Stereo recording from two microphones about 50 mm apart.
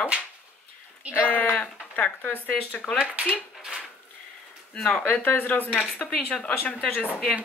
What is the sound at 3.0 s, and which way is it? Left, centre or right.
Speech, right.